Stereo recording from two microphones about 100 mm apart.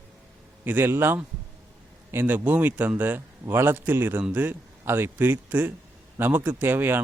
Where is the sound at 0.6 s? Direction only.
20° right (ahead or behind).